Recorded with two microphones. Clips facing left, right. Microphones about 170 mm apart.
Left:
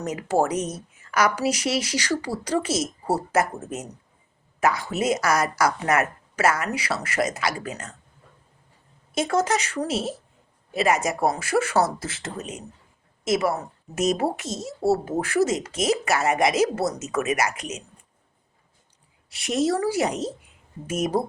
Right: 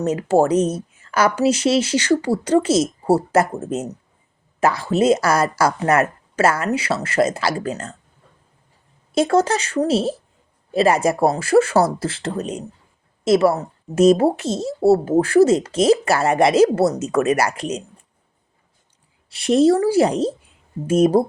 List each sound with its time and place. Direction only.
0.0 s speech: 30° right (ahead or behind)
9.1 s speech: 30° right (ahead or behind)
19.3 s speech: 30° right (ahead or behind)